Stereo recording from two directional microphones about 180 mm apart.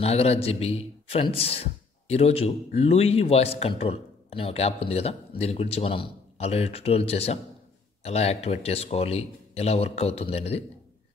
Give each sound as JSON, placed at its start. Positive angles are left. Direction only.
{"t": 0.0, "sound": "a man's voice", "side_deg": 35}